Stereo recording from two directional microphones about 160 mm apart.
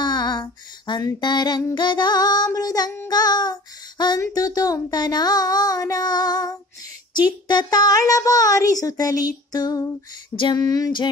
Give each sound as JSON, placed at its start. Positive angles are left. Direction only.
{"t": 0.0, "sound": "female singing", "side_deg": 25}
{"t": 1.8, "sound": "speech", "side_deg": 30}